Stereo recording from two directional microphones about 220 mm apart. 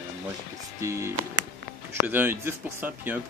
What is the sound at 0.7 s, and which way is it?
Speech, 15° right (ahead or behind).